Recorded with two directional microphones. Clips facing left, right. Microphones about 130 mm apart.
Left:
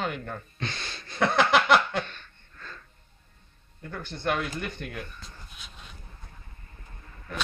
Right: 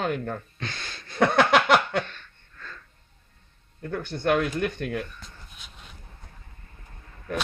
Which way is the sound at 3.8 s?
65° right (ahead or behind).